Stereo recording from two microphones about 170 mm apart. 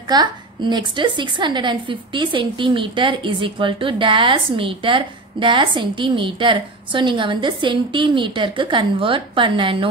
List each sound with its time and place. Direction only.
0.1 s a woman's voice: 25° right (ahead or behind)